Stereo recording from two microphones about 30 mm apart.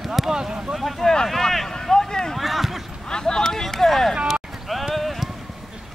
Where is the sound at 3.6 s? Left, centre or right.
Centre.